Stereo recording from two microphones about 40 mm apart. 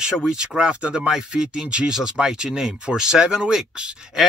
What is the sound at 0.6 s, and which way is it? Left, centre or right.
Speech, right.